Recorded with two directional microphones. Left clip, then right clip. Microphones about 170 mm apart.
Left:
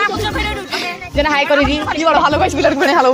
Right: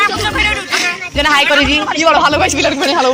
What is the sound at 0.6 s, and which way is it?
A man's voice, 10° right (ahead or behind).